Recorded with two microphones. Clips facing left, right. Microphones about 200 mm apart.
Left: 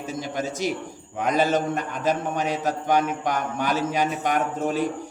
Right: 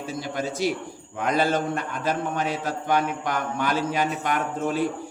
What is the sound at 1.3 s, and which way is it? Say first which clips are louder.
A man's voice: left 1 dB; 45° left (ahead or behind).